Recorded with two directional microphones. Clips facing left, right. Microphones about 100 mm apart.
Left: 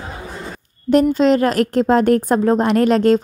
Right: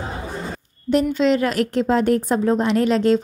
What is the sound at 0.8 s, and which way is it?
A woman's voice, 45° left (ahead or behind).